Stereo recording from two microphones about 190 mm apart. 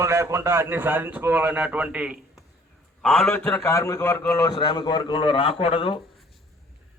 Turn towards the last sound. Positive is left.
turn(degrees=30)  # may be behind; listen again after turning